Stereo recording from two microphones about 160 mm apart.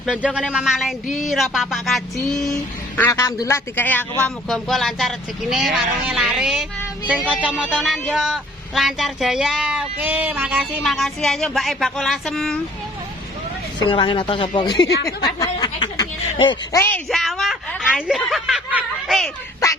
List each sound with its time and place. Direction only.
0.0 s speech: 5° right (ahead or behind)
3.0 s a woman's voice: 15° left (ahead or behind); by 6.7 s 5° right (ahead or behind)
7.4 s music: 5° right (ahead or behind)
7.8 s speech: 5° left (ahead or behind)
13.8 s speech: 30° left (ahead or behind)
16.7 s a woman's voice: 15° left (ahead or behind)
17.1 s a woman's voice: centre (ahead or behind)